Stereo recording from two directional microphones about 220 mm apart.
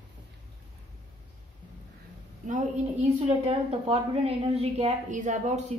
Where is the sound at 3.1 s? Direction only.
30° right (ahead or behind).